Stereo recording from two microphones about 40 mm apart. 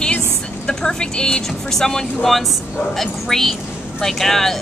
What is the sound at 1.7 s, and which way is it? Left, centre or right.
Speech, centre.